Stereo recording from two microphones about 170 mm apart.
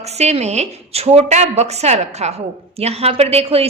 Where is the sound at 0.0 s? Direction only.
40° right (ahead or behind).